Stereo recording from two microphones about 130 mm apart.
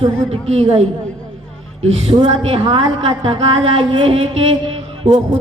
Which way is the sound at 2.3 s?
45° right (ahead or behind).